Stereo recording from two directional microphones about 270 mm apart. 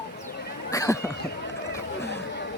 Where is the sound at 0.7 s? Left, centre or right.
Centre.